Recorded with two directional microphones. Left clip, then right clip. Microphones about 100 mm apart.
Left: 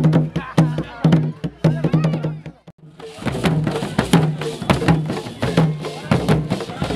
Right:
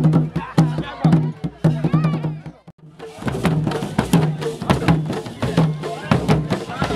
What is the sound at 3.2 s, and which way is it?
Music, 15° left (ahead or behind).